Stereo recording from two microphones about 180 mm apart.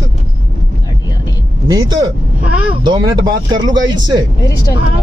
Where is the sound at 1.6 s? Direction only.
20° right (ahead or behind).